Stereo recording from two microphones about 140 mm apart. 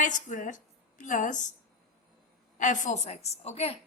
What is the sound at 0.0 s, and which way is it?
A woman's voice, 65° left (ahead or behind).